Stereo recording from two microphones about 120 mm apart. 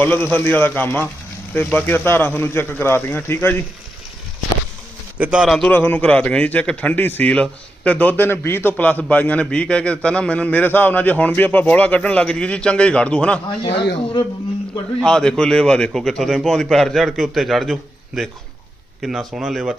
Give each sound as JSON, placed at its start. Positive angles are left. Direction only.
{"t": 0.0, "sound": "a man's voice", "side_deg": 15}
{"t": 5.1, "sound": "a man's voice", "side_deg": -10}
{"t": 5.5, "sound": "a man's voice", "side_deg": 5}
{"t": 5.7, "sound": "a man's voice", "side_deg": 15}
{"t": 13.7, "sound": "speech", "side_deg": 45}
{"t": 15.0, "sound": "a man's voice", "side_deg": 5}